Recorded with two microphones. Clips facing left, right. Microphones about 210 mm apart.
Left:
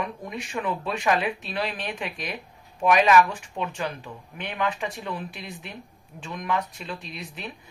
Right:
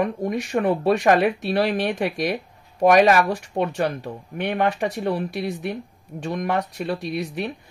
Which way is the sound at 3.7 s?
65° right (ahead or behind).